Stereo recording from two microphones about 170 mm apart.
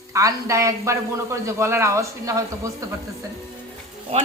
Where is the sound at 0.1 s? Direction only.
20° right (ahead or behind).